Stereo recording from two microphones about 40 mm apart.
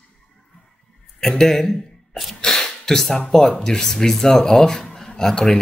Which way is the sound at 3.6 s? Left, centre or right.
Centre.